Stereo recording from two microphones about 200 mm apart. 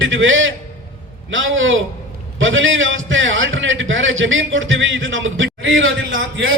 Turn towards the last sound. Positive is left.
turn(degrees=-80)